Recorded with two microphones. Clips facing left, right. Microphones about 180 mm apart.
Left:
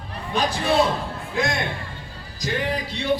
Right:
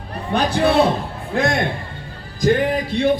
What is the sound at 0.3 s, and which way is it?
A man's voice, 60° right (ahead or behind).